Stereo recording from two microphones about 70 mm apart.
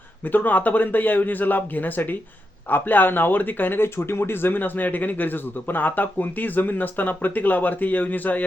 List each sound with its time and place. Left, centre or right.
0.3 s speech: left